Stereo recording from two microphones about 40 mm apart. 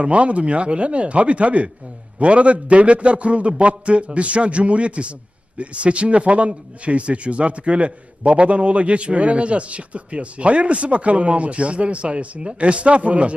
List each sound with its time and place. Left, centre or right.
0.0 s speech: right